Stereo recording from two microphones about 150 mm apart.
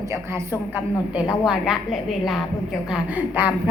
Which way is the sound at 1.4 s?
Centre (ahead or behind).